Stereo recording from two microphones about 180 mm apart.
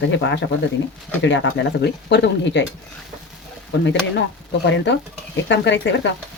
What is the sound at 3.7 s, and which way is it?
Speech, 80° left.